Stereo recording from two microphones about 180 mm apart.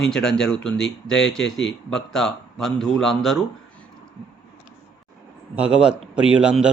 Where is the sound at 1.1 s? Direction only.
5° left (ahead or behind).